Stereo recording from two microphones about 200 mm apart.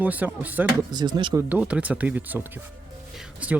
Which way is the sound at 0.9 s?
20° right (ahead or behind).